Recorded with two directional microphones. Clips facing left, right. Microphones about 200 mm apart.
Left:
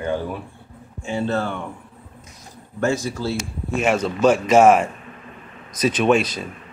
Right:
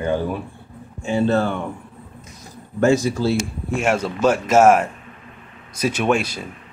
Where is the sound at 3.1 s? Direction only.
15° right (ahead or behind).